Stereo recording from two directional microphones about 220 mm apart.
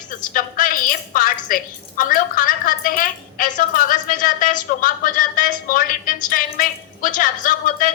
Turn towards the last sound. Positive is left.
turn(degrees=40)  # may be behind; listen again after turning